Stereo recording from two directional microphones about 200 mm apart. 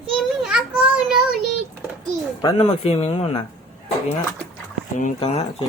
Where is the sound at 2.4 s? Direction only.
30° left (ahead or behind).